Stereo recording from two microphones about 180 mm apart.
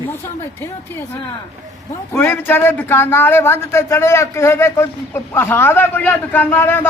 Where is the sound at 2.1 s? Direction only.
10° left (ahead or behind).